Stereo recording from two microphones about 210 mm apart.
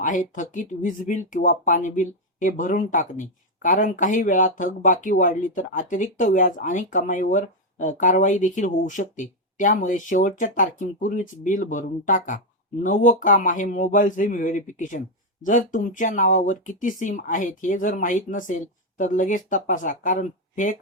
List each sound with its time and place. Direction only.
0.0 s speech: 35° left (ahead or behind)